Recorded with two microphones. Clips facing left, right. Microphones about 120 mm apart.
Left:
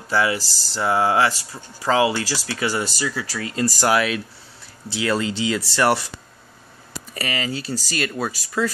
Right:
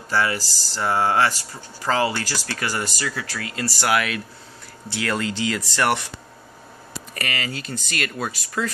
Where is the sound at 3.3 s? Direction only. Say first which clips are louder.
Left 5 dB; 30° left (ahead or behind).